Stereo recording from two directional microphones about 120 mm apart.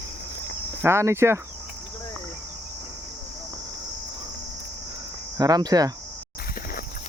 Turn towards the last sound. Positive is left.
turn(degrees=-30)  # may be behind; listen again after turning